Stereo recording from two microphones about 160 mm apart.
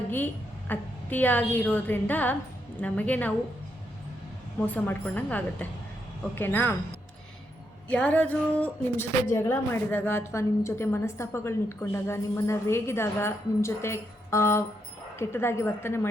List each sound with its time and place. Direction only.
0.7 s speech: 10° left (ahead or behind)
4.6 s speech: 10° left (ahead or behind)
7.9 s speech: 5° left (ahead or behind)